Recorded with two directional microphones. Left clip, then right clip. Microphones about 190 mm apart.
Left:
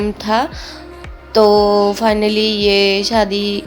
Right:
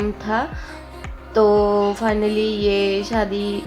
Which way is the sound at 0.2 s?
20° left (ahead or behind).